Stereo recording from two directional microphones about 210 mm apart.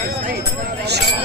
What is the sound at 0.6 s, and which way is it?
Music, 50° right (ahead or behind).